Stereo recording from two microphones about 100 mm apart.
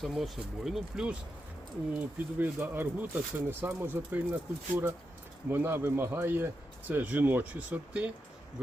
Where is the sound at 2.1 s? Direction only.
20° right (ahead or behind).